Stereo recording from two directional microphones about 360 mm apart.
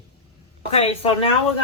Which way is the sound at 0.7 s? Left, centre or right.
Centre.